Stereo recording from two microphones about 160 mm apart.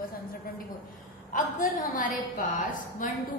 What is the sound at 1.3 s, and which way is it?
A woman's voice, 55° left (ahead or behind).